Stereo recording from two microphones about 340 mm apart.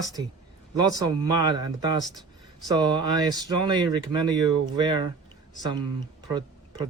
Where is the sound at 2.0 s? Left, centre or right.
Centre.